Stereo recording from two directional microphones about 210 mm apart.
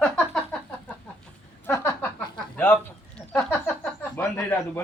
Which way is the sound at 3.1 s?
5° left (ahead or behind).